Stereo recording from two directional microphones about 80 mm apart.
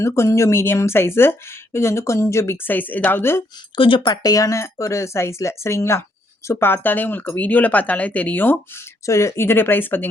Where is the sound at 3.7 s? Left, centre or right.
Left.